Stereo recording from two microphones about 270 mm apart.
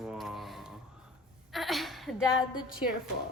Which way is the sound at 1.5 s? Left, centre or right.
Centre.